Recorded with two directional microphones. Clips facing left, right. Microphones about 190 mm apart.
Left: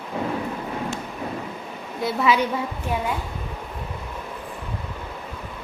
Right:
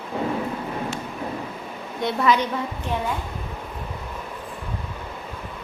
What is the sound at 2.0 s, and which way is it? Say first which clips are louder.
Speech: even; 5° left (ahead or behind).